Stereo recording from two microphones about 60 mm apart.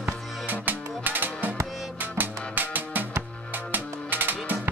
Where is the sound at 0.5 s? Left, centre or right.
Right.